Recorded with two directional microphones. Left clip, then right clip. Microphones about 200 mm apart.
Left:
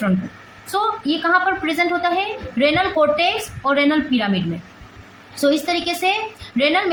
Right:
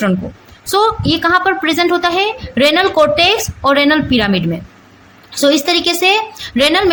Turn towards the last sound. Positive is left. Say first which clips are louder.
# right 5 dB
turn(degrees=-50)  # may be behind; listen again after turning